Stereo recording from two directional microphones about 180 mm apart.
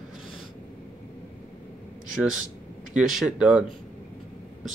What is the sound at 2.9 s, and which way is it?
Speech, centre (ahead or behind).